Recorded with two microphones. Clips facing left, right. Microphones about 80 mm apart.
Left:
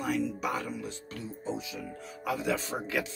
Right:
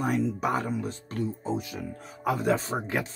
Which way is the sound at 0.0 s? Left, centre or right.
Right.